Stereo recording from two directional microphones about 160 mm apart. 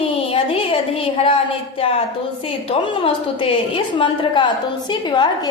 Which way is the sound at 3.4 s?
30° left (ahead or behind).